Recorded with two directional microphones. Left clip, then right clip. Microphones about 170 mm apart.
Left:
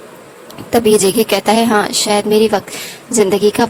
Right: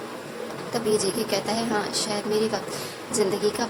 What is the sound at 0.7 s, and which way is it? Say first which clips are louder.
A woman's voice: left 14 dB; 55° left (ahead or behind).